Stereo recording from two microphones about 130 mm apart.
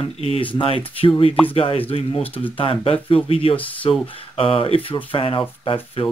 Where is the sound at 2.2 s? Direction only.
15° left (ahead or behind).